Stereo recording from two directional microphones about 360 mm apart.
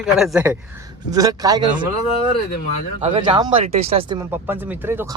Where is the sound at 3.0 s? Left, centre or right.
Centre.